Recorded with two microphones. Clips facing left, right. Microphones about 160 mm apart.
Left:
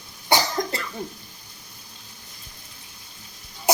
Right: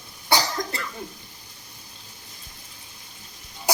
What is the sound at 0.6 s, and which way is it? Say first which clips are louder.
Cough: left 4 dB; 20° left (ahead or behind).